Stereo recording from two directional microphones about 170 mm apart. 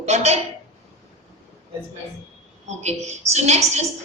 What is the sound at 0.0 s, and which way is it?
Speech, 40° right (ahead or behind).